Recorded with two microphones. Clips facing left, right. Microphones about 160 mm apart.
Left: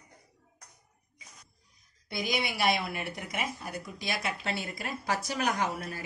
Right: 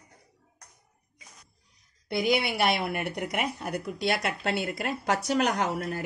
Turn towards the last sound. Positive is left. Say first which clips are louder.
# right 4 dB
turn(degrees=-60)  # may be behind; listen again after turning